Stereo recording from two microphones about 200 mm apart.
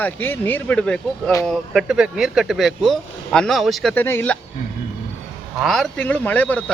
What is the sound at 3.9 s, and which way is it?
Speech, 10° left (ahead or behind).